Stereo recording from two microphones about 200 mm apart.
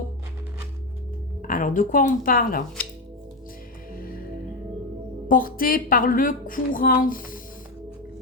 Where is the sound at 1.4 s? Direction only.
40° left (ahead or behind).